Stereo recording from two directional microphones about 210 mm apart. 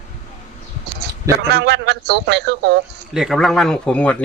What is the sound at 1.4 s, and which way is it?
A man's voice, 50° right (ahead or behind).